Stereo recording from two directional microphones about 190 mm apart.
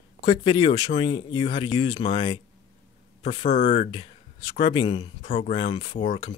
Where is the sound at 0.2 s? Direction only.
25° left (ahead or behind).